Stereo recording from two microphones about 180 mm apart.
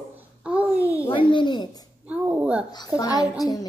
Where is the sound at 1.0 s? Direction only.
25° left (ahead or behind).